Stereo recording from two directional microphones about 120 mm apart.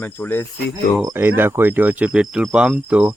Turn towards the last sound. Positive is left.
turn(degrees=-10)  # may be behind; listen again after turning